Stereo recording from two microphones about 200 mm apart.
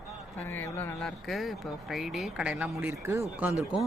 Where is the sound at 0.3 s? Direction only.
10° left (ahead or behind).